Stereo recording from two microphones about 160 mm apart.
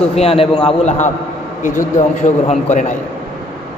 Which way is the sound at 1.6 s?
55° left (ahead or behind).